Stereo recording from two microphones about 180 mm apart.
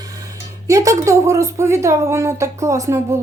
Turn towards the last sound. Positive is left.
turn(degrees=-15)  # may be behind; listen again after turning